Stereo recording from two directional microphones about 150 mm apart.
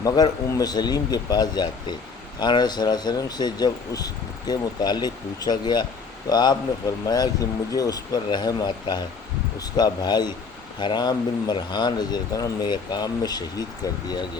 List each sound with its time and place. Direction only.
0.0 s speech: 25° left (ahead or behind)
7.7 s speech: 25° left (ahead or behind)